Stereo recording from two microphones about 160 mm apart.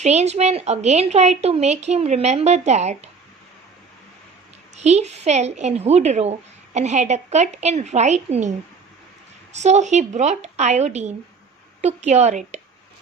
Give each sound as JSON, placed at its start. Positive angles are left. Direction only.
{"t": 0.0, "sound": "a woman's voice", "side_deg": -45}
{"t": 4.7, "sound": "a woman's voice", "side_deg": -45}